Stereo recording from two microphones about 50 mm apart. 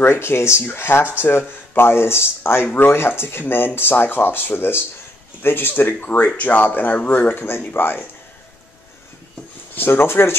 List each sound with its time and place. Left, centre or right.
0.0 s speech: left
2.4 s speech: left
9.8 s speech: left